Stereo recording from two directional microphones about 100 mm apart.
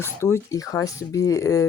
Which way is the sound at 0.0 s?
25° left (ahead or behind).